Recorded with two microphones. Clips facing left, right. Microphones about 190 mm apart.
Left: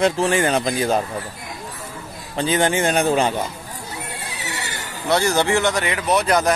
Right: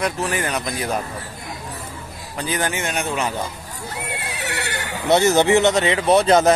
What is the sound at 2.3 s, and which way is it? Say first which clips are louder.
Speech: left 5 dB; 25° left (ahead or behind).